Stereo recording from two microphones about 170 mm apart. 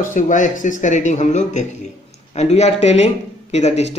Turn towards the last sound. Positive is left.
turn(degrees=40)  # may be behind; listen again after turning